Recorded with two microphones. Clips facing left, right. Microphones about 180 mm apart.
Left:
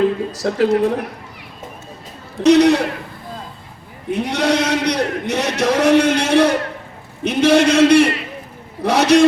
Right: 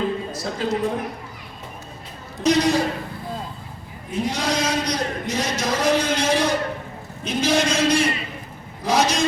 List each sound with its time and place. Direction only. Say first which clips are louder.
0.4 s speech: left 9 dB; 70° left (ahead or behind)
2.4 s speech: left 7 dB; 65° left (ahead or behind)
4.1 s a man's voice: left 6 dB; 65° left (ahead or behind)